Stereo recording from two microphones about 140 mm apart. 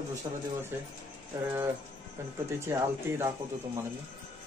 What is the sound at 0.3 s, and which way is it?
Speech, 25° right (ahead or behind).